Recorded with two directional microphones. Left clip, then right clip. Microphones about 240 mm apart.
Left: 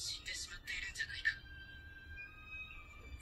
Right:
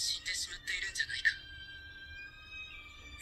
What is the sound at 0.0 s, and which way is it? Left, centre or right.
Music, right.